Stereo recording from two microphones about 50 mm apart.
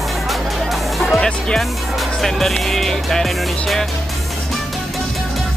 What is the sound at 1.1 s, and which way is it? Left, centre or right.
Speech, centre.